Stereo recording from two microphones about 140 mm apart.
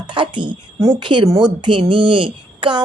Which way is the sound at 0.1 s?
35° right (ahead or behind).